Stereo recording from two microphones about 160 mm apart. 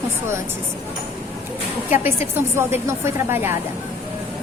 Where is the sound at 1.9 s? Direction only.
15° right (ahead or behind).